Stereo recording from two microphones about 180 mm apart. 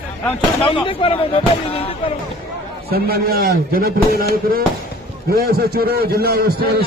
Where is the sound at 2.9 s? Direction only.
60° right (ahead or behind).